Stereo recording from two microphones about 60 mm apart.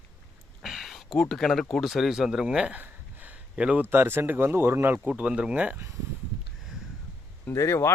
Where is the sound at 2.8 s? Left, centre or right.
Right.